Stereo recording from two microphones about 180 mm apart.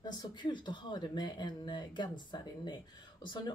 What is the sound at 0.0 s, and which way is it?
Speech, 25° left (ahead or behind).